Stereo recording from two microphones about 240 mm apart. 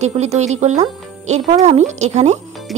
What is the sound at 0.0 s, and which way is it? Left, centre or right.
A woman's voice, right.